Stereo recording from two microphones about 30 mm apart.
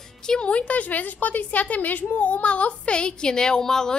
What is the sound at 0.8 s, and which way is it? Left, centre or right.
Speech, left.